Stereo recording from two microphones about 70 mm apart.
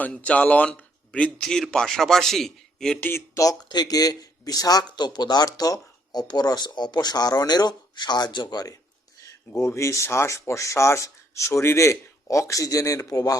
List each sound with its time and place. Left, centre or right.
0.0 s a man's voice: centre
3.0 s speech: left
3.3 s speech: left
4.9 s speech: left
5.5 s speech: left
9.6 s speech: left